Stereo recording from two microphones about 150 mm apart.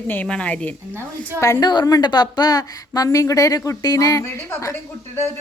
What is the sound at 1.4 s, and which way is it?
A woman's voice, 25° left (ahead or behind).